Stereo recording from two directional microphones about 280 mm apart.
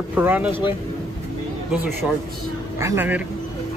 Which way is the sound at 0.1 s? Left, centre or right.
Centre.